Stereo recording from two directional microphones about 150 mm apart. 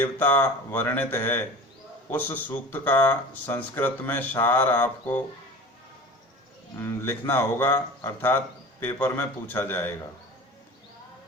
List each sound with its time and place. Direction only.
0.0 s speech: 10° left (ahead or behind)
6.7 s speech: 15° left (ahead or behind)